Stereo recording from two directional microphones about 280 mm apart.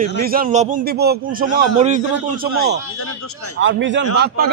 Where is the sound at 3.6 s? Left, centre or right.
Right.